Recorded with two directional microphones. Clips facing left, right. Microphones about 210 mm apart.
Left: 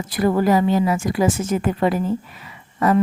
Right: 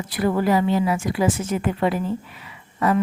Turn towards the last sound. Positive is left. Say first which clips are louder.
# left 3 dB
turn(degrees=45)  # may be behind; listen again after turning